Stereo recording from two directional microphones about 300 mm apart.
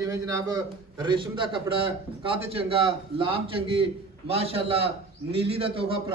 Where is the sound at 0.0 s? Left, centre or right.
Centre.